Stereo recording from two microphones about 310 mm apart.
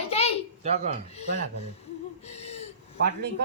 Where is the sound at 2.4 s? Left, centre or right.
Centre.